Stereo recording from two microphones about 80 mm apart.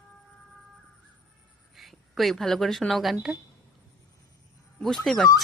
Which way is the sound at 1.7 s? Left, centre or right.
Centre.